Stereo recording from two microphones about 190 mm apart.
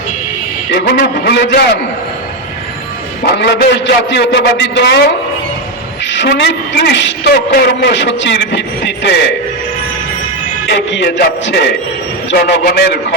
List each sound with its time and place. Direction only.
0.7 s a man's voice: 55° left (ahead or behind)
3.3 s a man's voice: 60° left (ahead or behind)
6.1 s a man's voice: 70° left (ahead or behind)
10.7 s a man's voice: 65° left (ahead or behind)